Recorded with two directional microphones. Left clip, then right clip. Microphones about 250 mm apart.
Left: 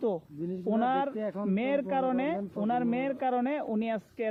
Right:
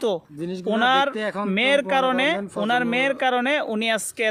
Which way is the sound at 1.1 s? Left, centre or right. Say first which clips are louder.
Right 8 dB; right.